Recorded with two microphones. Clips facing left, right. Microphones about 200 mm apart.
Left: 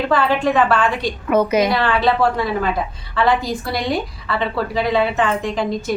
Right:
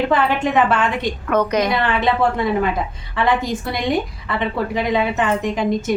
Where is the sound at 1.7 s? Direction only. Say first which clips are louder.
Left 1 dB; 20° right (ahead or behind).